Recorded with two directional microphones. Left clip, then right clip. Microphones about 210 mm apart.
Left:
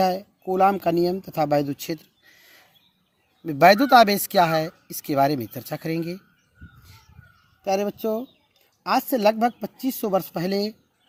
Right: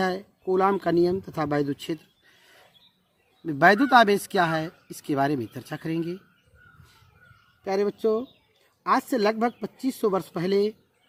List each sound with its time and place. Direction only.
0.1 s speech: 20° left (ahead or behind)
3.4 s speech: 20° left (ahead or behind)
7.9 s speech: 20° left (ahead or behind)